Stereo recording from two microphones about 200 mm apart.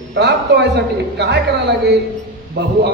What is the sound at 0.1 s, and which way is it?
A man's voice, 60° right (ahead or behind).